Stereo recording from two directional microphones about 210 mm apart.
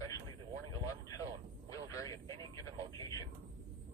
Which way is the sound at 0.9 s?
15° left (ahead or behind).